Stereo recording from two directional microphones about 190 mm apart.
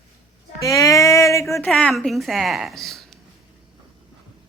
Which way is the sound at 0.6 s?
15° left (ahead or behind).